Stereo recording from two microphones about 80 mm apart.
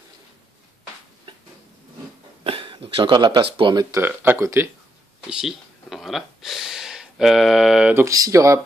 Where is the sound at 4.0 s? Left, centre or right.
Right.